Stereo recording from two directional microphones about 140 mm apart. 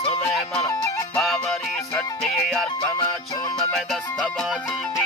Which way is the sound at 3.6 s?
Centre (ahead or behind).